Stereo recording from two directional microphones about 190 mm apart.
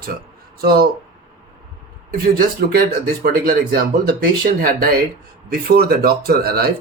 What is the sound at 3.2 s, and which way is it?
Speech, 50° right (ahead or behind).